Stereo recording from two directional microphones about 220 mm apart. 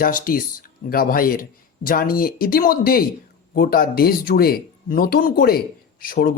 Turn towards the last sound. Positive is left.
turn(degrees=40)  # may be behind; listen again after turning